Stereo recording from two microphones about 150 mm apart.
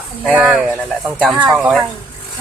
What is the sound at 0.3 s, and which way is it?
Speech, 10° right (ahead or behind).